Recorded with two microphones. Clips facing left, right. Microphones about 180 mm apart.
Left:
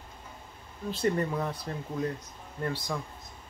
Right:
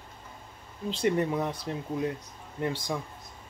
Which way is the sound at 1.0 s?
15° right (ahead or behind).